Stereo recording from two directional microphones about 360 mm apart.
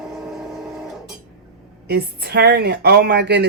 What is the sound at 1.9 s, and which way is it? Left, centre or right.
Speech, right.